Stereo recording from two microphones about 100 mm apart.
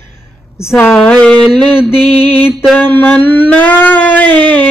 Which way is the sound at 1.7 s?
20° left (ahead or behind).